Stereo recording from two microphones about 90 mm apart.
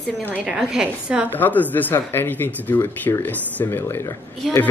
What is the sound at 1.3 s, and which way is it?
Speech, 20° left (ahead or behind).